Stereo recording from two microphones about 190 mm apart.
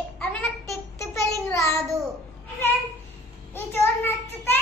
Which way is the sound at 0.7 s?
15° left (ahead or behind).